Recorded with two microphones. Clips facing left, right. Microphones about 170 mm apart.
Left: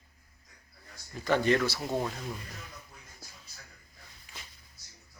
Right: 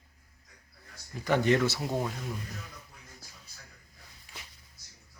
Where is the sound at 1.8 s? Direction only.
5° right (ahead or behind).